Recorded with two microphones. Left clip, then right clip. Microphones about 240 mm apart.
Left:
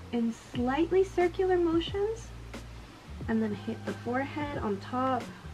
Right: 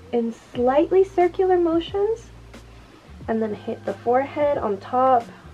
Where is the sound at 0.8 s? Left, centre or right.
Centre.